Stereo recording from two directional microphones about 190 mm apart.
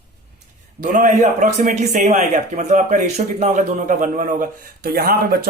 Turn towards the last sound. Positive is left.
turn(degrees=-50)  # may be behind; listen again after turning